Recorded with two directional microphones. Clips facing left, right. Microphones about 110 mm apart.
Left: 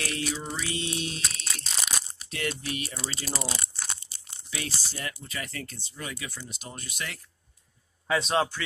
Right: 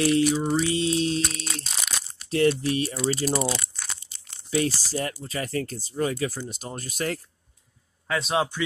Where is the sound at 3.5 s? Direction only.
30° left (ahead or behind).